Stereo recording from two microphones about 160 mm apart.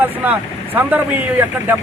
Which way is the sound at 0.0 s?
10° right (ahead or behind).